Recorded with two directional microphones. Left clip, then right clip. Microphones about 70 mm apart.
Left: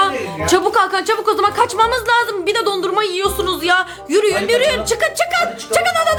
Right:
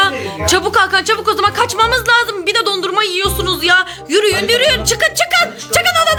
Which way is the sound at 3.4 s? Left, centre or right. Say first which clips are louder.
Right 4 dB; left.